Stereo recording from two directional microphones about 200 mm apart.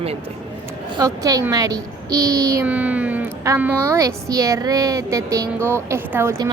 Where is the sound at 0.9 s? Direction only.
15° right (ahead or behind).